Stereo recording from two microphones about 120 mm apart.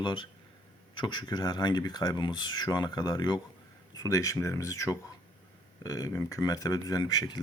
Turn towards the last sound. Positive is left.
turn(degrees=35)  # may be behind; listen again after turning